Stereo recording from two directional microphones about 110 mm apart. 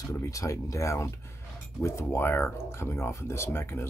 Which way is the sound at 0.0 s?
30° left (ahead or behind).